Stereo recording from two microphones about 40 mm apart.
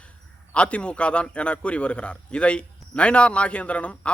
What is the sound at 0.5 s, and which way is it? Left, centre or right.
A man's voice, left.